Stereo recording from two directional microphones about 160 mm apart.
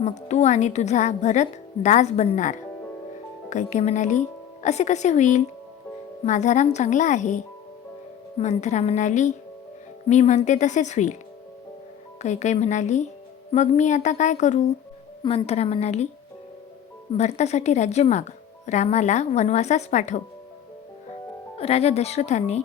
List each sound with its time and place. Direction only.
0.0 s speech: 45° left (ahead or behind)
8.4 s speech: 45° left (ahead or behind)
12.2 s speech: 45° left (ahead or behind)
15.2 s a woman's voice: 30° left (ahead or behind)
15.4 s speech: 40° left (ahead or behind)
17.2 s speech: 45° left (ahead or behind)
21.6 s speech: 40° left (ahead or behind)